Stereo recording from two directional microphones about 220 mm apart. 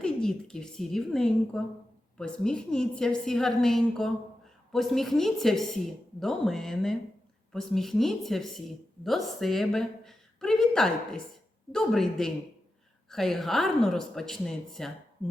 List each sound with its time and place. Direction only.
0.0 s a woman's voice: 5° left (ahead or behind)